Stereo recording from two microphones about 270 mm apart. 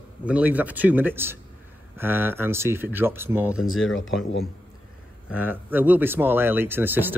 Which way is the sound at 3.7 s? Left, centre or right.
Left.